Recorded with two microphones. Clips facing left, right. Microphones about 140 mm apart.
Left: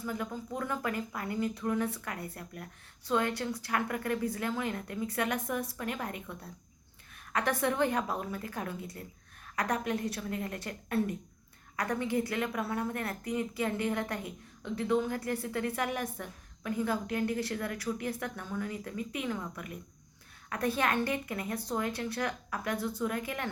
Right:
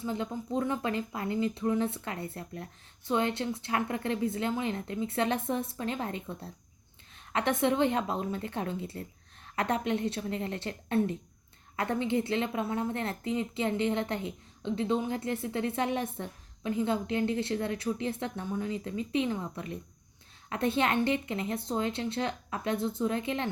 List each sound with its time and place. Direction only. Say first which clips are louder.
0.0 s a woman's voice: right 3 dB; 25° right (ahead or behind)